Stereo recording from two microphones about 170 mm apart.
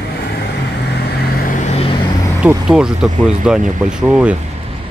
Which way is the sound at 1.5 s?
40° left (ahead or behind).